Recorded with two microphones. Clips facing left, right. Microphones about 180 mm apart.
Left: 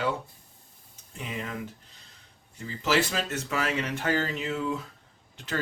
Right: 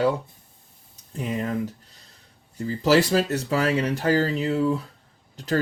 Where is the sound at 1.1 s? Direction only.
40° right (ahead or behind).